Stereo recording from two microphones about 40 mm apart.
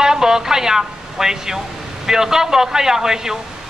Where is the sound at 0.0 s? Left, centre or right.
Centre.